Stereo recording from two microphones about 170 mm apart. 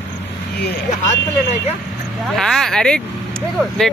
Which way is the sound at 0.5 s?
65° left (ahead or behind).